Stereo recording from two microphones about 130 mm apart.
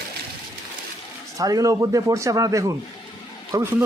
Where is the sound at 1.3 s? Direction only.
25° right (ahead or behind).